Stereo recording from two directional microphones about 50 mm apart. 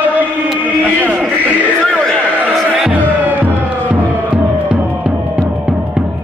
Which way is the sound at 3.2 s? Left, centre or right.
Right.